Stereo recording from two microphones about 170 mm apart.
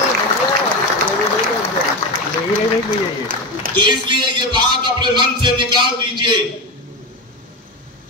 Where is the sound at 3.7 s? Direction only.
25° right (ahead or behind).